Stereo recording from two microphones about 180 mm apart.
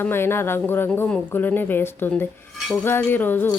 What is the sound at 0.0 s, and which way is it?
Speech, 15° left (ahead or behind).